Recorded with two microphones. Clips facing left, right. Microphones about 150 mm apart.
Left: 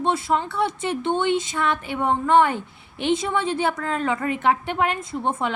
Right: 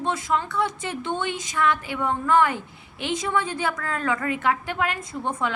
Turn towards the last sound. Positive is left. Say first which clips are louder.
# left 3 dB
turn(degrees=25)  # may be behind; listen again after turning